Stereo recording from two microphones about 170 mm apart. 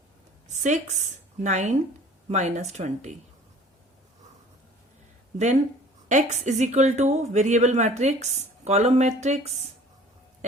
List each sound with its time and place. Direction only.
0.4 s a woman's voice: 45° right (ahead or behind)
5.4 s a woman's voice: 45° right (ahead or behind)